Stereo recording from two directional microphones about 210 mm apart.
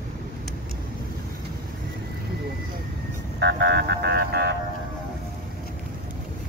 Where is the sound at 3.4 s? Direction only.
55° right (ahead or behind).